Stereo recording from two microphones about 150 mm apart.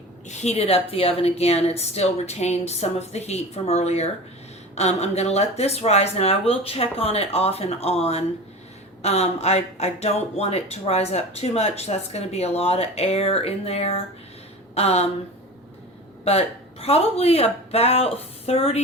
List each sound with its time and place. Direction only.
0.3 s speech: 45° left (ahead or behind)
16.2 s speech: 40° left (ahead or behind)